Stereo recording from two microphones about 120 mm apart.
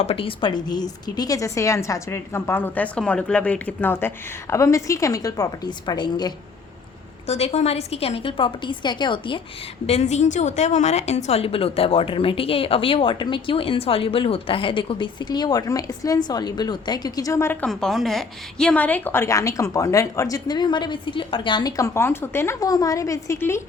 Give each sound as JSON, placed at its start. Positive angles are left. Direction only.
{"t": 0.0, "sound": "a woman's voice", "side_deg": 55}
{"t": 7.3, "sound": "a woman's voice", "side_deg": 60}
{"t": 9.8, "sound": "a woman's voice", "side_deg": 65}
{"t": 17.7, "sound": "a woman's voice", "side_deg": 0}
{"t": 21.8, "sound": "a woman's voice", "side_deg": 25}
{"t": 22.6, "sound": "a woman's voice", "side_deg": 30}